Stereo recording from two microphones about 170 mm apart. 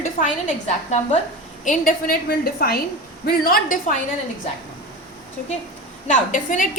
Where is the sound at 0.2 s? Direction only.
45° left (ahead or behind).